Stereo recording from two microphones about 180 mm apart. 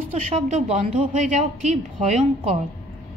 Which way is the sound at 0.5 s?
40° right (ahead or behind).